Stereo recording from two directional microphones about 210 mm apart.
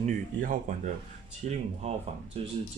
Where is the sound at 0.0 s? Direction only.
40° right (ahead or behind).